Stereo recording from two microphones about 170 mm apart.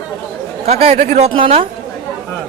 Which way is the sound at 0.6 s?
35° right (ahead or behind).